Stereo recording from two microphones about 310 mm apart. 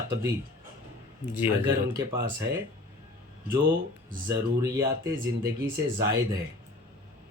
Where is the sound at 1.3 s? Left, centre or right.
Centre.